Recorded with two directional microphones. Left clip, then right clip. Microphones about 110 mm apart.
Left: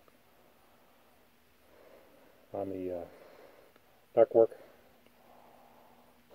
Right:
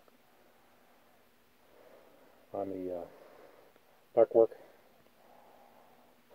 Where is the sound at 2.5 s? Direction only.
5° left (ahead or behind).